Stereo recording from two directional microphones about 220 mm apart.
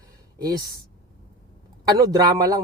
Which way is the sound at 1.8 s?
15° right (ahead or behind).